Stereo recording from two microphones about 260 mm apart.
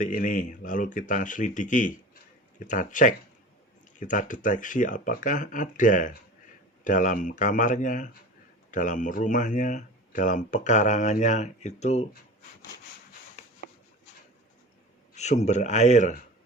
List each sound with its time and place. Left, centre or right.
0.0 s speech: left
15.1 s speech: left